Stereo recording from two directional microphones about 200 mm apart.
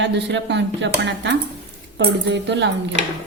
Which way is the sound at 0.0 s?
60° right (ahead or behind).